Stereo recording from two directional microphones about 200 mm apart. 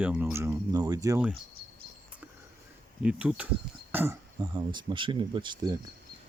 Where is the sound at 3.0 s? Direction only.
5° right (ahead or behind); by 5.7 s 25° right (ahead or behind).